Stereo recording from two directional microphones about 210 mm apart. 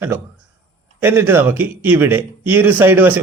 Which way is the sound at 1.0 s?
10° right (ahead or behind).